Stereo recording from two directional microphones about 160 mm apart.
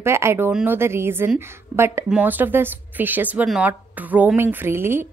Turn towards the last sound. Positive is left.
turn(degrees=-15)  # may be behind; listen again after turning